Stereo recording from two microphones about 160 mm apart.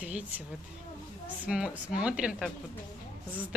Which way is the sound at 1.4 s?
5° right (ahead or behind).